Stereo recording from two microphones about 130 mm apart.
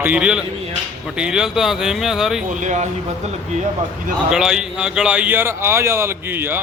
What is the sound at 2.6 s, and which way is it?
Speech, 70° right (ahead or behind).